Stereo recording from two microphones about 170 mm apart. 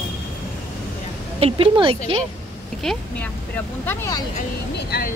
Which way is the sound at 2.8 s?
5° left (ahead or behind).